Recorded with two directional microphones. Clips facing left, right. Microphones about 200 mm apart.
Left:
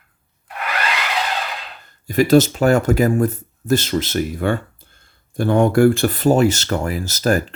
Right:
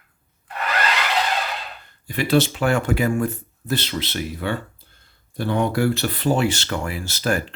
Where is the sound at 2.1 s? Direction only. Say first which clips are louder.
Left 6 dB; 45° left (ahead or behind).